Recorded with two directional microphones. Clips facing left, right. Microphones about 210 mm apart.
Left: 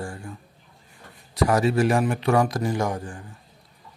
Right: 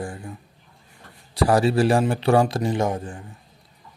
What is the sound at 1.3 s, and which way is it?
Speech, 30° right (ahead or behind).